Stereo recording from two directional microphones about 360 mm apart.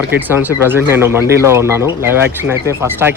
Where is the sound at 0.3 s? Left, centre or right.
Centre.